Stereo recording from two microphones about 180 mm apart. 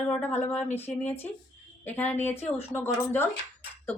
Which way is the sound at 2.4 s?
35° left (ahead or behind).